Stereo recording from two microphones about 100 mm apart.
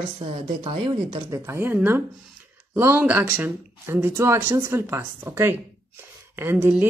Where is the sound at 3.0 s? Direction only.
20° right (ahead or behind).